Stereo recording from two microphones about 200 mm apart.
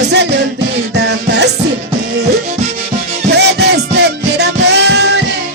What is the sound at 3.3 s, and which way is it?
Music, 55° right (ahead or behind).